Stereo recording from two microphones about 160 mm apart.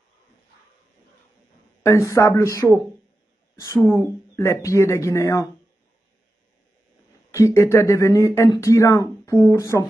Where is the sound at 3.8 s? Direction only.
15° left (ahead or behind).